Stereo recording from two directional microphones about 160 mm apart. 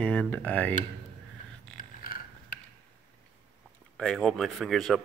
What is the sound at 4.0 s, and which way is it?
Speech, 5° left (ahead or behind).